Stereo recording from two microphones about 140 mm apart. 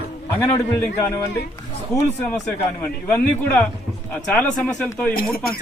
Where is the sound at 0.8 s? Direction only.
20° left (ahead or behind).